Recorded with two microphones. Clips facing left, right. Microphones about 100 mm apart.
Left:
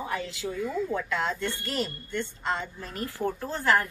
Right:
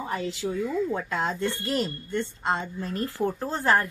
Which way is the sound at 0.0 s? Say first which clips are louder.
Right 3 dB; 30° right (ahead or behind).